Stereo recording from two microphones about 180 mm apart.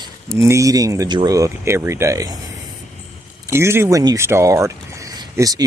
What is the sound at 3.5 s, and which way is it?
Speech, 15° right (ahead or behind).